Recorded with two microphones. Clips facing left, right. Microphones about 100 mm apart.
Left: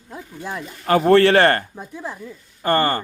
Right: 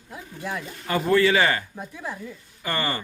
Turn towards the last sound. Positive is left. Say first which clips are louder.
# left 9 dB
turn(degrees=50)  # may be behind; listen again after turning